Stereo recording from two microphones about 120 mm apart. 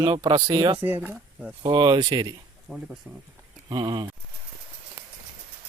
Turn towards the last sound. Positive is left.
turn(degrees=-40)  # may be behind; listen again after turning